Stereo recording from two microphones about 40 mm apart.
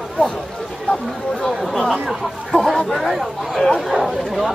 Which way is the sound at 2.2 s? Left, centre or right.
Centre.